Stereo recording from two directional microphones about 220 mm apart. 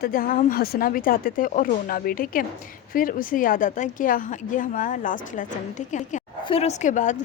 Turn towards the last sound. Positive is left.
turn(degrees=35)  # may be behind; listen again after turning